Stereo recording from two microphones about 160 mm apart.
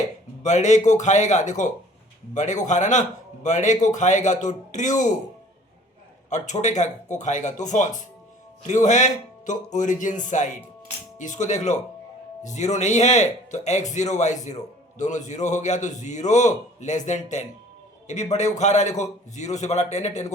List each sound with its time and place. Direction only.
0.4 s speech: 45° left (ahead or behind)
6.3 s a man's voice: 50° left (ahead or behind)